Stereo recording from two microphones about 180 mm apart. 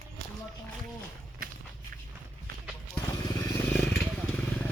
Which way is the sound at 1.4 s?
50° right (ahead or behind).